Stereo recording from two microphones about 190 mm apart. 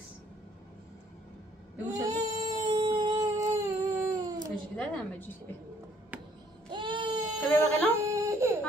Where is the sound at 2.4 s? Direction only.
35° right (ahead or behind).